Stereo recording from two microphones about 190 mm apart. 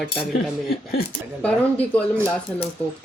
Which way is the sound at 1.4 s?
5° left (ahead or behind).